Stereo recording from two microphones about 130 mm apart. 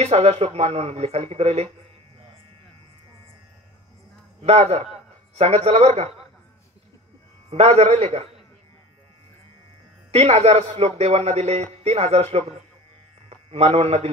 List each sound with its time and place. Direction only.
0.0 s speech: 55° right (ahead or behind)
4.4 s a man's voice: 55° right (ahead or behind)
7.4 s a man's voice: 55° right (ahead or behind)
10.1 s speech: 55° right (ahead or behind)